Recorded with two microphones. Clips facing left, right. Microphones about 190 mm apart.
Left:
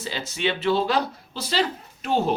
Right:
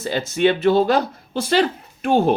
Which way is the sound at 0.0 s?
50° right (ahead or behind).